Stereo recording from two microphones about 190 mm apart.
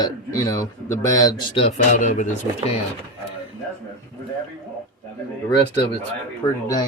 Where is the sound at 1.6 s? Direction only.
35° left (ahead or behind).